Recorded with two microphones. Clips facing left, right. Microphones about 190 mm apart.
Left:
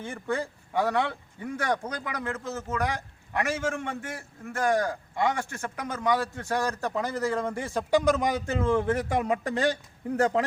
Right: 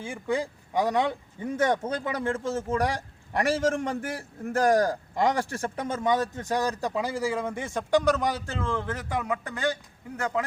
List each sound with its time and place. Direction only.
0.0 s a man's voice: 10° right (ahead or behind)
8.6 s speech: 20° left (ahead or behind)